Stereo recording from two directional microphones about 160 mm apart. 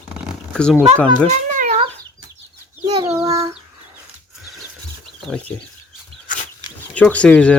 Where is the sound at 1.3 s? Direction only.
50° right (ahead or behind).